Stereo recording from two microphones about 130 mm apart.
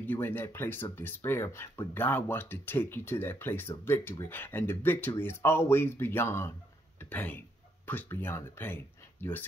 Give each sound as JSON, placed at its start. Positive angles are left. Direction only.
{"t": 0.0, "sound": "speech", "side_deg": 15}